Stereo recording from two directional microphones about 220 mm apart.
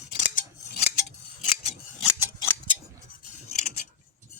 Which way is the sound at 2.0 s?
15° left (ahead or behind).